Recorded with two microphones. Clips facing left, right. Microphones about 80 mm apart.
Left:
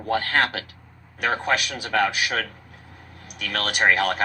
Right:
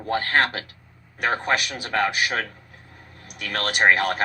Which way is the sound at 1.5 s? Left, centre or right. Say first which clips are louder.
Even; right.